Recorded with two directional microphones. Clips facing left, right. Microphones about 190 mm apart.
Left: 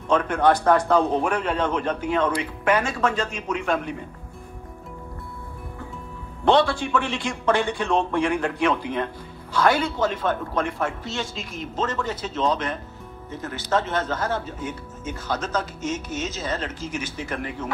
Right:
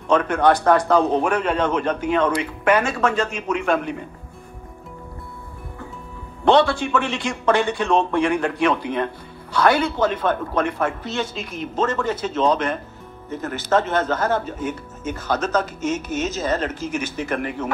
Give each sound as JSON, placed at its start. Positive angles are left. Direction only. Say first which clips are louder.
{"t": 0.1, "sound": "a man's voice", "louder": "right 2 dB", "side_deg": -75}
{"t": 6.4, "sound": "a man's voice", "louder": "right 3 dB", "side_deg": -75}